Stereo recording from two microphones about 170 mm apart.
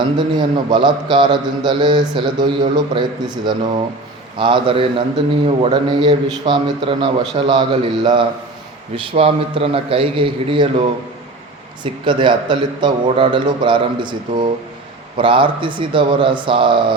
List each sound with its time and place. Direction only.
0.0 s a man's voice: 30° right (ahead or behind)